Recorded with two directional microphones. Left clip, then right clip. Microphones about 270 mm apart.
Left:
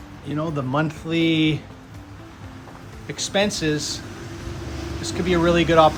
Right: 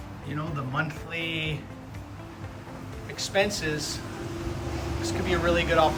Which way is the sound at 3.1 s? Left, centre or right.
Left.